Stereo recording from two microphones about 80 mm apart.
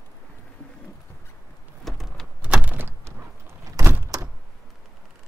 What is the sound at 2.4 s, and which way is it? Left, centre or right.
Door, centre.